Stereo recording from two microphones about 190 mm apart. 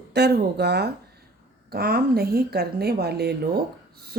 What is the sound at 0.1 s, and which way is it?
A woman's voice, 60° right (ahead or behind).